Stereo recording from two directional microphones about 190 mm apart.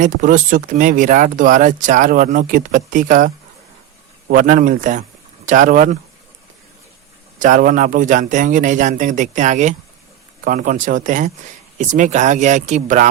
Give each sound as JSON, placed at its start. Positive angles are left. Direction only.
{"t": 0.0, "sound": "speech", "side_deg": -45}
{"t": 7.3, "sound": "a man's voice", "side_deg": -45}